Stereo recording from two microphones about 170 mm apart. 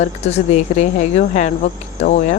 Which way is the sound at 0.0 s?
40° left (ahead or behind).